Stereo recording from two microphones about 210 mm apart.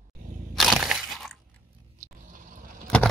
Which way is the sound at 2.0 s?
40° right (ahead or behind).